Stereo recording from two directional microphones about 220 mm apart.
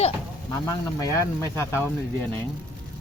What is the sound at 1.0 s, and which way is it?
Speech, 15° left (ahead or behind).